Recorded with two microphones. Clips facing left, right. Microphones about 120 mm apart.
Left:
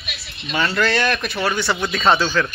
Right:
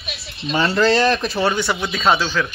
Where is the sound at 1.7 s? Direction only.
Centre (ahead or behind).